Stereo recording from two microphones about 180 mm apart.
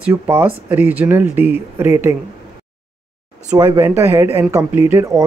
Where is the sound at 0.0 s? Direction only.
10° right (ahead or behind).